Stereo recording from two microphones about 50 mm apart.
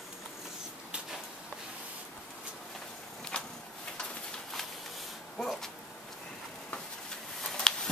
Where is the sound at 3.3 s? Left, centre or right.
Left.